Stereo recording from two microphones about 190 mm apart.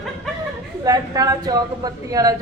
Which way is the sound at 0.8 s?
20° right (ahead or behind).